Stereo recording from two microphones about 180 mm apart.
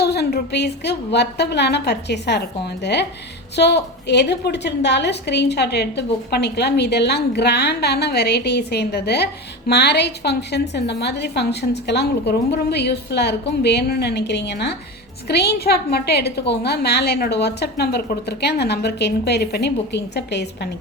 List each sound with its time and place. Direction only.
0.0 s a woman's voice: 65° left (ahead or behind)